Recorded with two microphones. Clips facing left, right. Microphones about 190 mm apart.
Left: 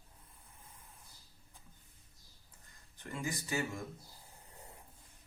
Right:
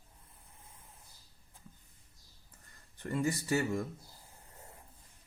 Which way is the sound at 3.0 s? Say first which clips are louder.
Right 8 dB; 60° right (ahead or behind).